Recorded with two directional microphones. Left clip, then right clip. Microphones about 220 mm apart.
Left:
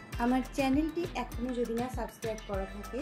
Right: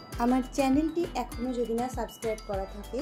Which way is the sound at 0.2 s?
25° right (ahead or behind).